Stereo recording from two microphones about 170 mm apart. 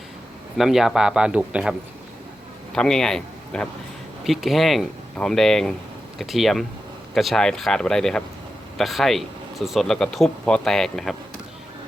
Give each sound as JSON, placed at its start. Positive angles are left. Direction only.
{"t": 0.5, "sound": "speech", "side_deg": 0}
{"t": 2.7, "sound": "a man's voice", "side_deg": 5}